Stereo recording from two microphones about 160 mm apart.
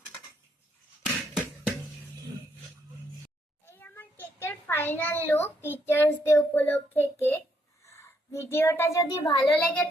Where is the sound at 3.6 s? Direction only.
15° left (ahead or behind).